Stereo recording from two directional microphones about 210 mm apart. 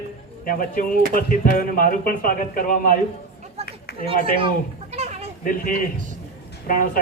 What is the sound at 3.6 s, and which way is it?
Run, 30° right (ahead or behind).